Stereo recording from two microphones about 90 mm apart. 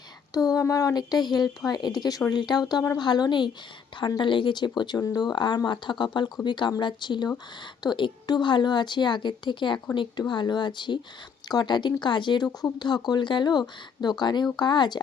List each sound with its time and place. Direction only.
0.3 s speech: 40° left (ahead or behind)